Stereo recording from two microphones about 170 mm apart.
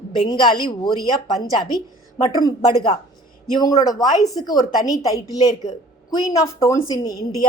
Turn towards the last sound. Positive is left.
turn(degrees=20)  # may be behind; listen again after turning